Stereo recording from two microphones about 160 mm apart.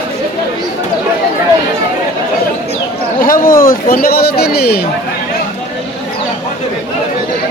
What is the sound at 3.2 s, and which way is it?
Speech, 60° left (ahead or behind).